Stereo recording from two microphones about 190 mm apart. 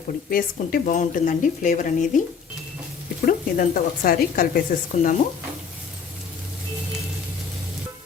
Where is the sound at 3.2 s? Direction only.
50° left (ahead or behind).